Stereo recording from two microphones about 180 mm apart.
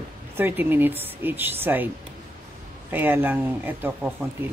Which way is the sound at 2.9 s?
10° right (ahead or behind).